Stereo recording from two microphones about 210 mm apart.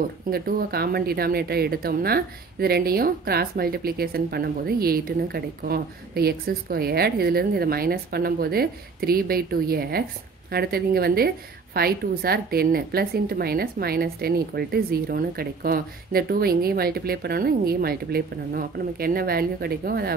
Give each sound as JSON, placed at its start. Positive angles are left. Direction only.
{"t": 0.3, "sound": "speech", "side_deg": -45}